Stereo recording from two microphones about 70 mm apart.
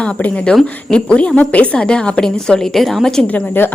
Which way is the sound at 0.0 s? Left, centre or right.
Centre.